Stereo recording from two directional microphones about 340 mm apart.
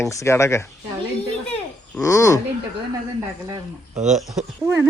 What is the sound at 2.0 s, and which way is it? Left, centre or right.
Speech, centre.